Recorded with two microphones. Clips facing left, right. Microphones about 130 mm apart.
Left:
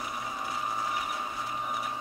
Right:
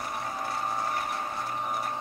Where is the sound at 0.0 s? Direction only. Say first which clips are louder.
Right 2 dB; 55° right (ahead or behind).